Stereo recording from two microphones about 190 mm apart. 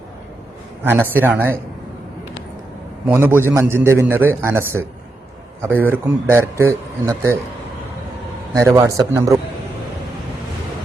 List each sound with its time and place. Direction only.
1.1 s a man's voice: 10° right (ahead or behind)
3.1 s a man's voice: 10° right (ahead or behind)
8.5 s a man's voice: 15° right (ahead or behind)